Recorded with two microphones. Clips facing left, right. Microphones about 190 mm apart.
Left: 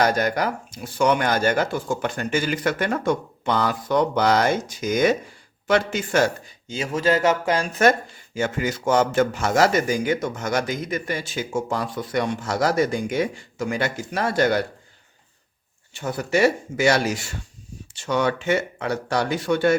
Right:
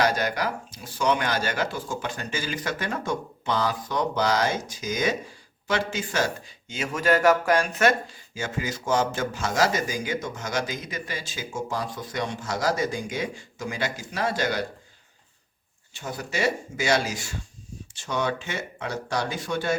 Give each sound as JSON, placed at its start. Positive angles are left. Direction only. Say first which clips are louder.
{"t": 0.0, "sound": "a man's voice", "louder": "left 4 dB", "side_deg": 50}
{"t": 6.7, "sound": "speech", "louder": "left 2 dB", "side_deg": 30}
{"t": 8.4, "sound": "a man's voice", "louder": "left 6 dB", "side_deg": 60}
{"t": 16.0, "sound": "a man's voice", "louder": "left 7 dB", "side_deg": 60}